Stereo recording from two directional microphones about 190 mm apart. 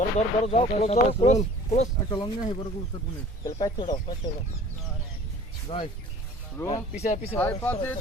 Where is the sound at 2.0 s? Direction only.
25° left (ahead or behind).